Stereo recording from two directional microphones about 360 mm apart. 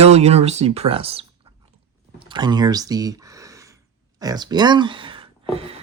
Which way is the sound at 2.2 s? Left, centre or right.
Centre.